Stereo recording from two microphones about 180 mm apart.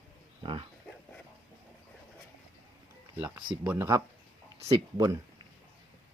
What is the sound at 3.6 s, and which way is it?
Speech, 15° right (ahead or behind).